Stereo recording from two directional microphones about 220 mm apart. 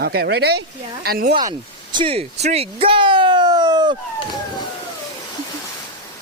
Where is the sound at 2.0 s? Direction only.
25° right (ahead or behind).